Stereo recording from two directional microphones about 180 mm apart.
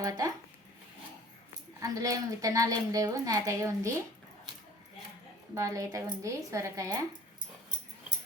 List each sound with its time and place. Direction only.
0.0 s a woman's voice: 20° right (ahead or behind)
1.8 s a woman's voice: 20° right (ahead or behind)
5.5 s speech: 15° right (ahead or behind)